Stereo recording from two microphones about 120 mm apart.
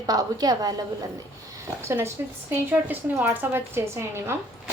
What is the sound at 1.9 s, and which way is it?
A woman's voice, 20° right (ahead or behind).